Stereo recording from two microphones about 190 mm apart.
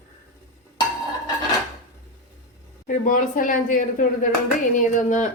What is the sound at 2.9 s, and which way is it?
A woman's voice, 45° left (ahead or behind).